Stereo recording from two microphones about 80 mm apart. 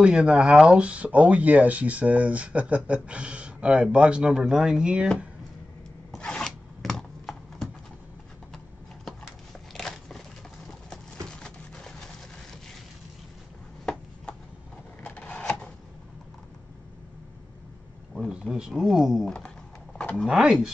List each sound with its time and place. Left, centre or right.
0.0 s speech: centre
6.1 s zipper: centre
9.8 s biting: centre
11.2 s a sound: centre
15.0 s printer: centre
18.3 s a sound: centre
18.7 s speech: centre
20.0 s a sound: centre
20.2 s speech: centre